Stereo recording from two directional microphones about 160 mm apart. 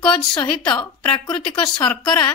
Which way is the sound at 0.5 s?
30° left (ahead or behind).